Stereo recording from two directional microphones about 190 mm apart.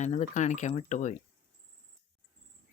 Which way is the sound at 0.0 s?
40° left (ahead or behind).